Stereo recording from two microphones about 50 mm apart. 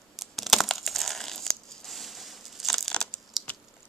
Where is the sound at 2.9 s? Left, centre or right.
Left.